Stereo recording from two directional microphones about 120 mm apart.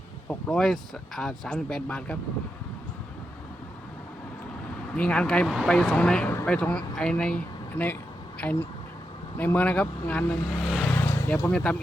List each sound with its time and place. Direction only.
0.3 s speech: 5° left (ahead or behind)
4.9 s speech: 10° left (ahead or behind)
10.6 s vehicle: centre (ahead or behind)
10.8 s a sound: 20° left (ahead or behind)
11.5 s speech: 10° left (ahead or behind)